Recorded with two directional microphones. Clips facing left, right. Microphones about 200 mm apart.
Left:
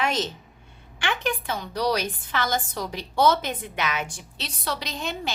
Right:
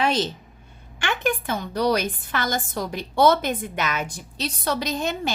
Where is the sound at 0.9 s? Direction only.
45° right (ahead or behind).